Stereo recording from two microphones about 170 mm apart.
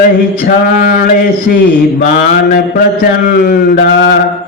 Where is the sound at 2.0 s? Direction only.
50° left (ahead or behind).